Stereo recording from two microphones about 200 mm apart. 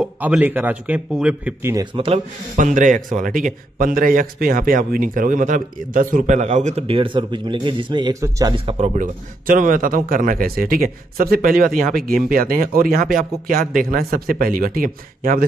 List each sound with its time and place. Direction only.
0.0 s speech: 5° right (ahead or behind)
2.0 s a man's voice: 30° right (ahead or behind); by 15.4 s 45° right (ahead or behind)